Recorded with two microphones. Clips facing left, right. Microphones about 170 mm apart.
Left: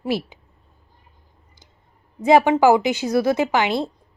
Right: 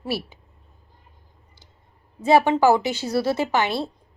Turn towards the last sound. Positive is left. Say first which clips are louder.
# left 3 dB
turn(degrees=15)  # may be behind; listen again after turning